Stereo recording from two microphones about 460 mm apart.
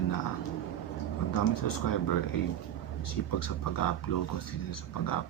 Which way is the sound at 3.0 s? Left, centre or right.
Left.